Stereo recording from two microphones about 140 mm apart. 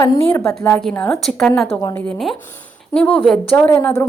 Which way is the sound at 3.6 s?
15° left (ahead or behind).